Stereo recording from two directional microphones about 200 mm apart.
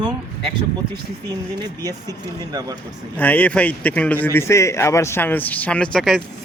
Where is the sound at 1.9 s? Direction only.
20° right (ahead or behind).